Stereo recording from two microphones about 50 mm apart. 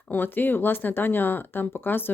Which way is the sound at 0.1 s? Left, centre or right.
Left.